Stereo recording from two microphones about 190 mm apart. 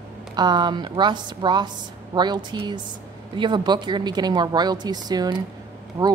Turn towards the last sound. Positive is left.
turn(degrees=-15)  # may be behind; listen again after turning